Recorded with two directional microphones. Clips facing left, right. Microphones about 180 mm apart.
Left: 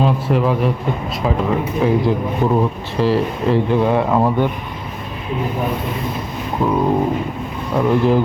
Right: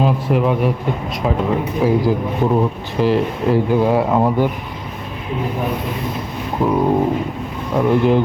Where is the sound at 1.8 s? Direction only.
5° right (ahead or behind).